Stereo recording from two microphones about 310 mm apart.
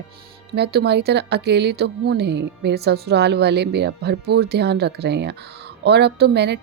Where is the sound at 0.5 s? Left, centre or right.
Right.